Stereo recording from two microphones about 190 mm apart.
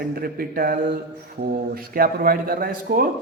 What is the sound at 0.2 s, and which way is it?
A man's voice, 50° right (ahead or behind).